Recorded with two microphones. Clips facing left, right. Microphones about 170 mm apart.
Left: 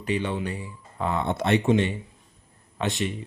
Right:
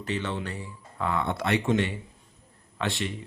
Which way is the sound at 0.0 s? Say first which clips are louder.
Left 4 dB; 15° left (ahead or behind).